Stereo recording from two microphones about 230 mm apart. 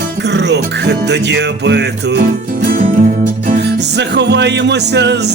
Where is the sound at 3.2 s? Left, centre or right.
Right.